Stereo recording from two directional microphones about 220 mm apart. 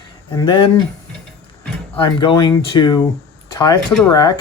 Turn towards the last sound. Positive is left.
turn(degrees=15)  # may be behind; listen again after turning